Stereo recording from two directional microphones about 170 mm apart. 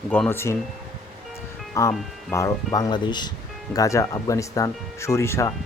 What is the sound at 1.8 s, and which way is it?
Speech, 20° left (ahead or behind).